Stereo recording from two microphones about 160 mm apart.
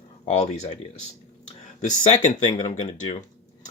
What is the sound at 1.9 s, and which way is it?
Speech, 50° left (ahead or behind).